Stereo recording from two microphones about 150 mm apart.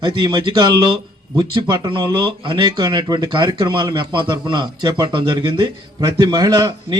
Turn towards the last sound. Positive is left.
turn(degrees=-25)  # may be behind; listen again after turning